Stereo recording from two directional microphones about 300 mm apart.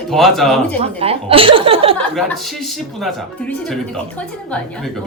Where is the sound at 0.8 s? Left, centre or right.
Centre.